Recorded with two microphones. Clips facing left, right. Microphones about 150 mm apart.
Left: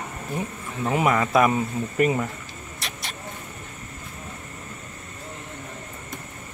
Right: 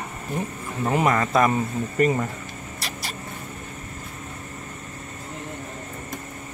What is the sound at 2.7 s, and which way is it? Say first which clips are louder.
Vehicle: right 2 dB; centre (ahead or behind).